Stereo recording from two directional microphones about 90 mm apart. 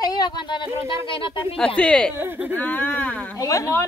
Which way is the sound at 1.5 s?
10° left (ahead or behind).